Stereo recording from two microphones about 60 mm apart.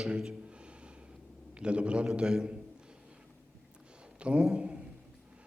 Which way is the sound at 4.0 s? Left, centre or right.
Centre.